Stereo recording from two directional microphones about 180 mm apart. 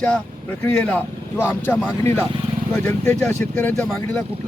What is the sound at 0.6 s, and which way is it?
Speech, 5° left (ahead or behind).